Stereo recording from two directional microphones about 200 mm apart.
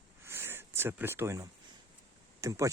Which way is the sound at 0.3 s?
10° right (ahead or behind).